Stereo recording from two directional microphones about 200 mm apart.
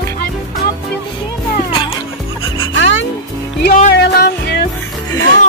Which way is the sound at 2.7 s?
65° left (ahead or behind).